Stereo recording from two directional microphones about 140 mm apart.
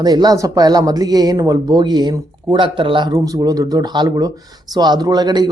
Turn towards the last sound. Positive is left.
turn(degrees=-30)  # may be behind; listen again after turning